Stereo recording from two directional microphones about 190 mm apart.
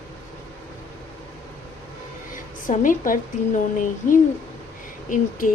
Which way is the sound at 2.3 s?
45° left (ahead or behind).